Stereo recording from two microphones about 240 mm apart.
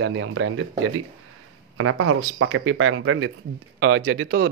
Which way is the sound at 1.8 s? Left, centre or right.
Right.